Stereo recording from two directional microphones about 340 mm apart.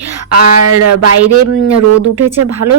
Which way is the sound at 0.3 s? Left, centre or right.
Right.